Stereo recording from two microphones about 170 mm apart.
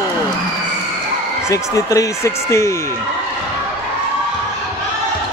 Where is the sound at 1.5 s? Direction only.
20° left (ahead or behind).